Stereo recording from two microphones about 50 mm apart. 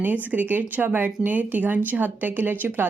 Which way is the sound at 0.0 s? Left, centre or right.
Right.